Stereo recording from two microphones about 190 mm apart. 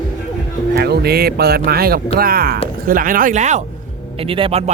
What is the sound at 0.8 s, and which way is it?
A man's voice, 55° right (ahead or behind).